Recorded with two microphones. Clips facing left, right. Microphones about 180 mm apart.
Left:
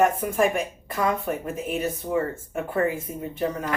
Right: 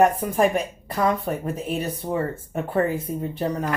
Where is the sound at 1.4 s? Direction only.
35° right (ahead or behind).